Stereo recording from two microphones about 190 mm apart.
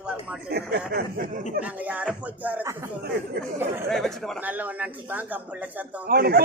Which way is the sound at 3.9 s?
Centre (ahead or behind).